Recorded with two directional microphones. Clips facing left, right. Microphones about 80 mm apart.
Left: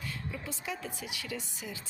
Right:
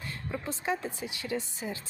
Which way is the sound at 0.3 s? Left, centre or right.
Right.